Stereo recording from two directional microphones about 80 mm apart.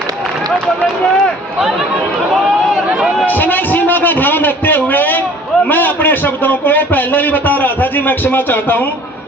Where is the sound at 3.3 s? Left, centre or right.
Left.